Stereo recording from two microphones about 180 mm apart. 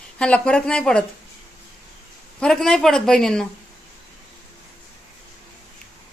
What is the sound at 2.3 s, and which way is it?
Speech, 5° left (ahead or behind).